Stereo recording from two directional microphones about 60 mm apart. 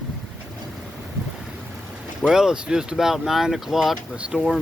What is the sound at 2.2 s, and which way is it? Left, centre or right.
Speech, centre.